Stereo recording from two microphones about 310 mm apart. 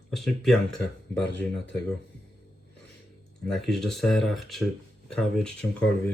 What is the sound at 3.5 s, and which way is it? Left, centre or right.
Speech, centre.